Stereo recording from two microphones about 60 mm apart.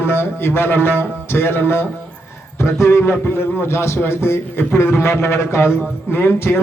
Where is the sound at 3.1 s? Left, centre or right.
Left.